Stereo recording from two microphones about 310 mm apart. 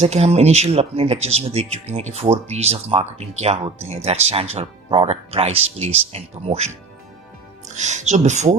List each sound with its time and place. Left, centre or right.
0.0 s speech: right
7.8 s speech: right